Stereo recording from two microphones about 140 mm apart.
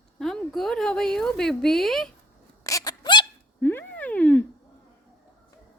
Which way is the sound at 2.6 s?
25° left (ahead or behind).